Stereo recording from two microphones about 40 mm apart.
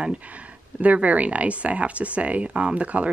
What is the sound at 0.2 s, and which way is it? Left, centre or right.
Speech, right.